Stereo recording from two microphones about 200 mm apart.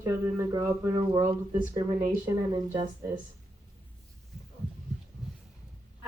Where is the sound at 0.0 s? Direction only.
15° right (ahead or behind).